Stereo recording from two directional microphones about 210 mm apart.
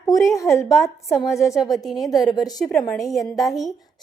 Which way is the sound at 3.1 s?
Centre (ahead or behind).